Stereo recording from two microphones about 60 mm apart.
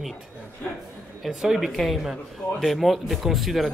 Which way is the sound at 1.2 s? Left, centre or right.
Centre.